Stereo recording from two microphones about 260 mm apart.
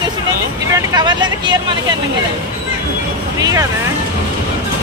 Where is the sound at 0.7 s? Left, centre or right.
Centre.